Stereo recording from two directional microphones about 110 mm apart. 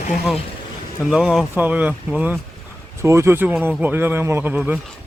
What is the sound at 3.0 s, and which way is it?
Speech, 25° right (ahead or behind).